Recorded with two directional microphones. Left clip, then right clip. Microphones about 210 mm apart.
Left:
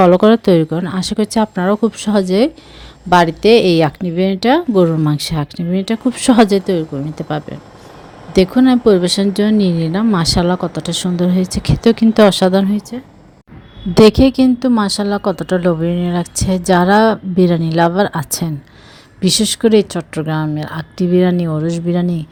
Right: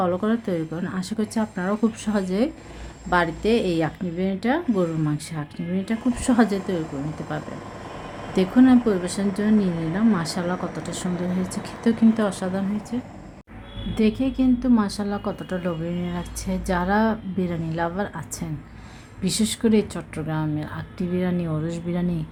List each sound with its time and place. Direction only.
0.0 s speech: 40° left (ahead or behind)